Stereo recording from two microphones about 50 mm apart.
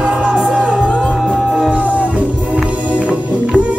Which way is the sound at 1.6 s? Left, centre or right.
Right.